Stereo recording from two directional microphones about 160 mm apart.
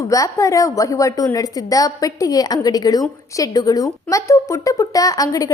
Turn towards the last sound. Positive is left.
turn(degrees=20)  # may be behind; listen again after turning